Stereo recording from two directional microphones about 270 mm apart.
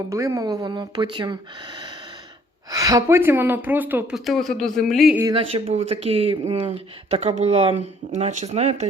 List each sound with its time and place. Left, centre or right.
0.1 s a woman's voice: centre
5.2 s speech: centre